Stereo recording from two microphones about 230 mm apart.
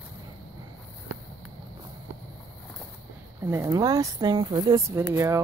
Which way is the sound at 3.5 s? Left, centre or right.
Centre.